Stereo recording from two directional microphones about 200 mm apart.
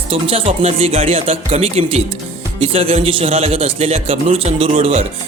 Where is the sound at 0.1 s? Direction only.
30° right (ahead or behind).